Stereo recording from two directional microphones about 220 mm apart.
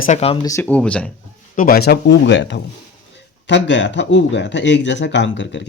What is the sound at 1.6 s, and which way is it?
Speech, 40° left (ahead or behind).